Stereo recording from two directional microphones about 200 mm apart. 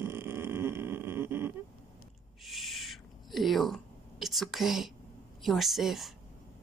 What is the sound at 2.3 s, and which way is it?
Owl, centre (ahead or behind).